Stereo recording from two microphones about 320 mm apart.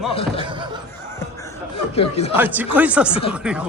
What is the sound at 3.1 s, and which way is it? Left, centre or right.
Speech, centre.